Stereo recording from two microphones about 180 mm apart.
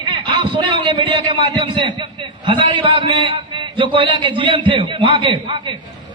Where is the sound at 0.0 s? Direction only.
25° right (ahead or behind).